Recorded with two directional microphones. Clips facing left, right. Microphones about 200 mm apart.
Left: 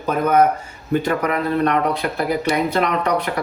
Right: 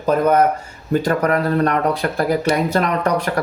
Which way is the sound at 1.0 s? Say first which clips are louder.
Right 3 dB; 45° right (ahead or behind).